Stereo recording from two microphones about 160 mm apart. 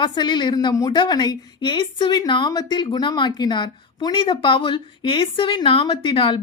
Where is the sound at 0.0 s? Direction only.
30° left (ahead or behind).